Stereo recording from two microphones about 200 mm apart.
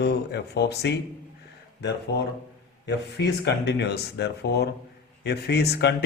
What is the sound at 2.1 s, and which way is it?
Speech, 55° left (ahead or behind).